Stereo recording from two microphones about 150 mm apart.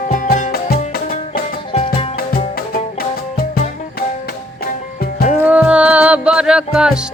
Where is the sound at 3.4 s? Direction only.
80° left.